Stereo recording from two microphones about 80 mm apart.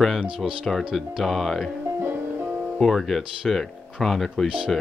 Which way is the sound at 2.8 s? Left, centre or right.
Centre.